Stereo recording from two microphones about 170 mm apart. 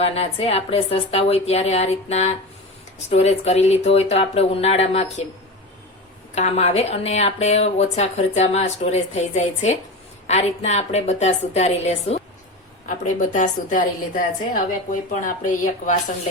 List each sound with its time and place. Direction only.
0.0 s speech: 35° left (ahead or behind)
6.3 s a woman's voice: 40° left (ahead or behind)